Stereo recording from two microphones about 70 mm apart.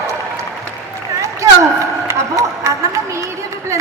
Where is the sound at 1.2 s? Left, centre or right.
Right.